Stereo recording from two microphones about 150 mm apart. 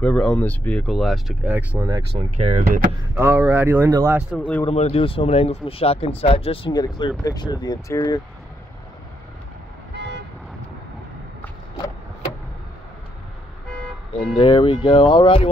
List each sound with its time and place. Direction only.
0.0 s speech: 10° left (ahead or behind)
1.5 s speech: 10° right (ahead or behind)
2.1 s speech: 45° right (ahead or behind)
3.2 s speech: 15° right (ahead or behind)
4.4 s speech: 10° left (ahead or behind)
4.6 s speech: 40° left (ahead or behind); by 8.2 s 25° left (ahead or behind)
14.3 s speech: 35° left (ahead or behind)